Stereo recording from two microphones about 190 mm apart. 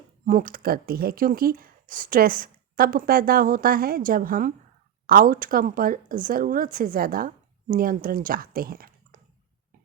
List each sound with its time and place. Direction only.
0.3 s speech: 45° right (ahead or behind)